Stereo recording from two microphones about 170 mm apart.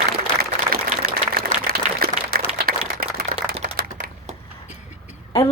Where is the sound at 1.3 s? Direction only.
65° right (ahead or behind).